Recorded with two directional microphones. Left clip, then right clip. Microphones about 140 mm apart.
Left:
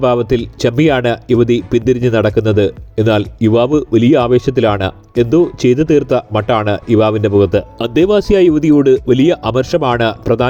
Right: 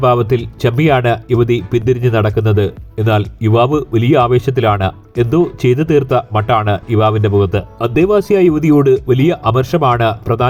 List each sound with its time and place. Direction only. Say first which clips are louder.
0.0 s speech: even; 25° left (ahead or behind)
7.1 s speech: left 3 dB; 40° left (ahead or behind)